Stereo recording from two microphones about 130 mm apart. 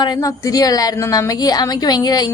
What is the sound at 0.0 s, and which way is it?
A woman's voice, 30° left (ahead or behind).